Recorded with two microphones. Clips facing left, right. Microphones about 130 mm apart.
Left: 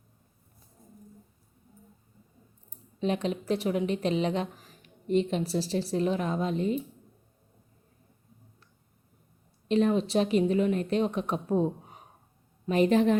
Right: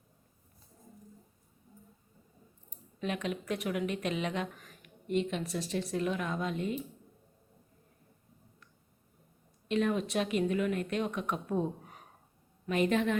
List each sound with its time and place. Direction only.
3.0 s a woman's voice: 30° left (ahead or behind)
9.6 s a woman's voice: 30° left (ahead or behind)